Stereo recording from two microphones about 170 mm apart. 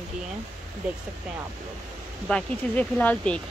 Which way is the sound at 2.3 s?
5° left (ahead or behind).